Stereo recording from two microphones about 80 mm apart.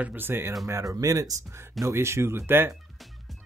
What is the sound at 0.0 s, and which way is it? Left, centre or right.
Speech, right.